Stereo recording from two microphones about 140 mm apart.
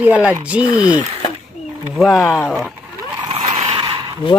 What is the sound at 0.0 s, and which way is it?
Speech, 10° right (ahead or behind).